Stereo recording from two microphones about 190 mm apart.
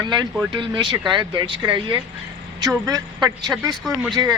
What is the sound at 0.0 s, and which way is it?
Speech, 25° right (ahead or behind).